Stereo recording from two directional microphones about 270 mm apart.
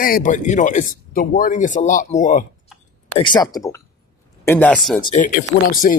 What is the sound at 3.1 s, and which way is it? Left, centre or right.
Speech, centre.